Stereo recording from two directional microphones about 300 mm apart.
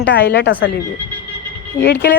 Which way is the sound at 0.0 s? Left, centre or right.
Left.